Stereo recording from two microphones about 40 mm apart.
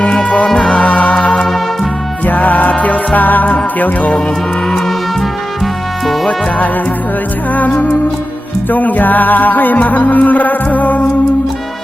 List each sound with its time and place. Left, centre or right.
0.0 s music: left
1.5 s music: centre
2.2 s music: left
7.5 s music: left